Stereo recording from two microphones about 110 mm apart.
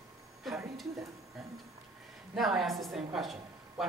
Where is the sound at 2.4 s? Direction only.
5° right (ahead or behind).